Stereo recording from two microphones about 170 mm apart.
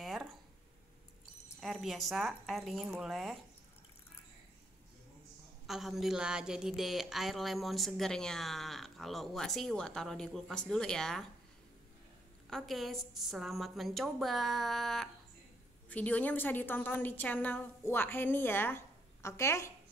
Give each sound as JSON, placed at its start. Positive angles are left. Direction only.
{"t": 0.0, "sound": "a sound", "side_deg": 0}
{"t": 1.6, "sound": "a woman's voice", "side_deg": 0}
{"t": 5.7, "sound": "a woman's voice", "side_deg": 0}
{"t": 12.4, "sound": "a woman's voice", "side_deg": 0}